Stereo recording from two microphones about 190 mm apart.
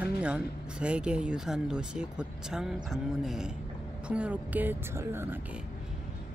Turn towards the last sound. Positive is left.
turn(degrees=-10)  # may be behind; listen again after turning